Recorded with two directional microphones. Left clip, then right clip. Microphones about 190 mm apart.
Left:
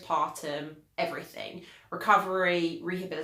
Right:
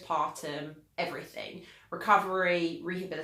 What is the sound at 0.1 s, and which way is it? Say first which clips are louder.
Speech: left 2 dB; 15° left (ahead or behind).